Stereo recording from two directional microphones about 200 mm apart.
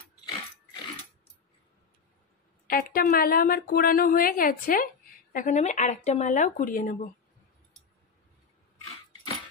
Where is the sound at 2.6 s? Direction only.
45° left (ahead or behind).